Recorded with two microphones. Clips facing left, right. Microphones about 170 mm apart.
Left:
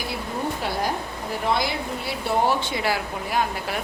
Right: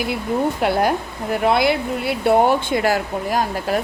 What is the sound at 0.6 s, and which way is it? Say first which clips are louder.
Speech: right 8 dB; 65° right (ahead or behind).